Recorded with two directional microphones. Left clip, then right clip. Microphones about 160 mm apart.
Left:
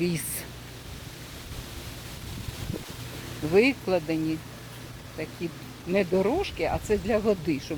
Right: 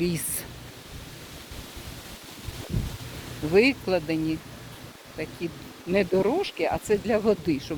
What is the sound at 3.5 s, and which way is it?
Speech, 5° left (ahead or behind).